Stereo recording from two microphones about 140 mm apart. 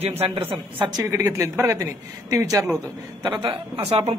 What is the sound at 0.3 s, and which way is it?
Speech, 30° right (ahead or behind).